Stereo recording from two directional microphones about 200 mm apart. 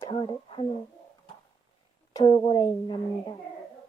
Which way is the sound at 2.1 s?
20° left (ahead or behind).